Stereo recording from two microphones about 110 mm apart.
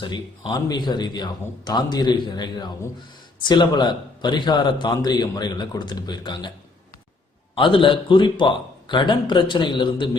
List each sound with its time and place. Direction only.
0.0 s a man's voice: 45° left (ahead or behind)
7.5 s a man's voice: 55° left (ahead or behind)